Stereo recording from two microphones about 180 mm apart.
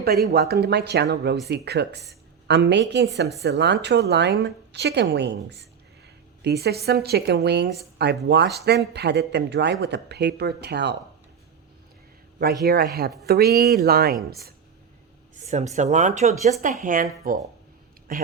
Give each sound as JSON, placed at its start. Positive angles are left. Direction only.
{"t": 0.3, "sound": "speech", "side_deg": -65}
{"t": 12.6, "sound": "speech", "side_deg": -60}
{"t": 15.4, "sound": "a woman's voice", "side_deg": -40}